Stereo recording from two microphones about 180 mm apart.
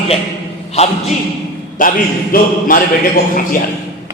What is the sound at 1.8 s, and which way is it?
A man's voice, 50° left (ahead or behind).